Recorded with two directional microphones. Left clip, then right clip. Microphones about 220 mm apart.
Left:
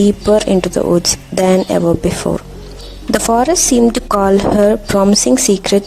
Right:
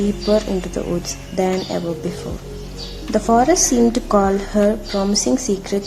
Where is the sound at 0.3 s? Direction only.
40° left (ahead or behind).